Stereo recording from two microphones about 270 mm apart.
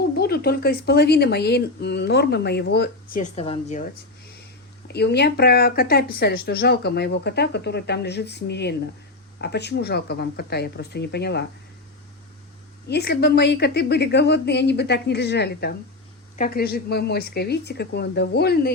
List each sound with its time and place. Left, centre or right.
0.2 s speech: left
4.9 s speech: left
12.9 s speech: left